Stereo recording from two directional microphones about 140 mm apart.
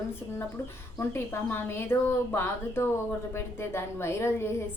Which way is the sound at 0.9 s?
20° left (ahead or behind).